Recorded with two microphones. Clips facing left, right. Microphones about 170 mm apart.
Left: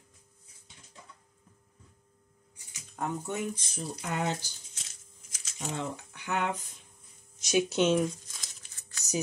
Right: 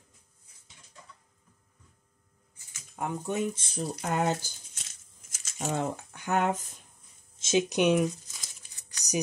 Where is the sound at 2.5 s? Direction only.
15° left (ahead or behind).